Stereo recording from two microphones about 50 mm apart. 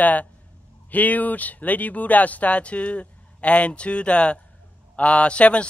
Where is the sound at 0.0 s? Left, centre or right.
Left.